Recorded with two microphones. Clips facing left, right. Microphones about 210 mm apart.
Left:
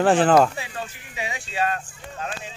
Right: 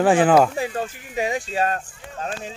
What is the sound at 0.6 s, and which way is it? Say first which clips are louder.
Speech: right 8 dB; 45° right (ahead or behind).